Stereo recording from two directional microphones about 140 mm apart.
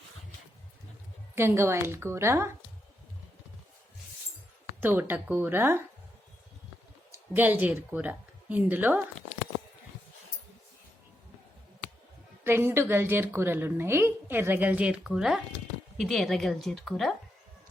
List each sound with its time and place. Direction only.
1.4 s a woman's voice: 20° right (ahead or behind)
4.8 s a woman's voice: 15° right (ahead or behind)
7.3 s a woman's voice: 15° right (ahead or behind)
12.5 s a woman's voice: 15° right (ahead or behind); by 17.2 s centre (ahead or behind)